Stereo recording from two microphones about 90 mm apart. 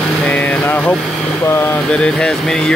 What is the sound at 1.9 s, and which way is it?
Speech, 10° left (ahead or behind).